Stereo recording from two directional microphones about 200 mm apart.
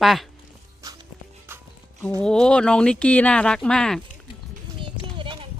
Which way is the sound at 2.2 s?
5° left (ahead or behind).